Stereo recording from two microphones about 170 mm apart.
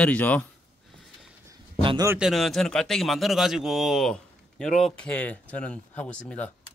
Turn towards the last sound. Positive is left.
turn(degrees=10)  # may be behind; listen again after turning